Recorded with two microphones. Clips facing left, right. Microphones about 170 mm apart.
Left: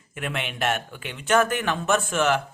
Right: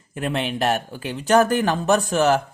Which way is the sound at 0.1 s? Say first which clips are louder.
Right 6 dB; 35° right (ahead or behind).